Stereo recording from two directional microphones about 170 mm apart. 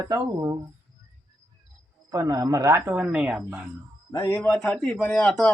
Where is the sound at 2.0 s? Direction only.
20° right (ahead or behind).